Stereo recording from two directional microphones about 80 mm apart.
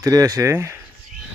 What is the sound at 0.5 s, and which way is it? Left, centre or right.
Speech, right.